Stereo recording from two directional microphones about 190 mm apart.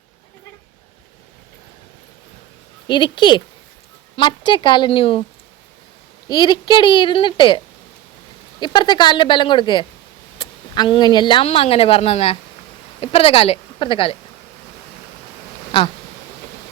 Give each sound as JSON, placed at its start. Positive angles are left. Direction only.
{"t": 2.8, "sound": "a woman's voice", "side_deg": 25}
{"t": 6.2, "sound": "a woman's voice", "side_deg": 25}
{"t": 8.6, "sound": "a woman's voice", "side_deg": 25}